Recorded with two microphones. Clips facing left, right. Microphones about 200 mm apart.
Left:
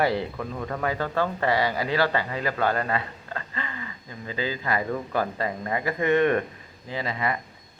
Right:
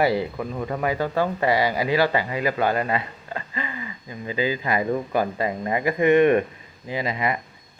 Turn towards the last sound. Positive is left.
turn(degrees=-15)  # may be behind; listen again after turning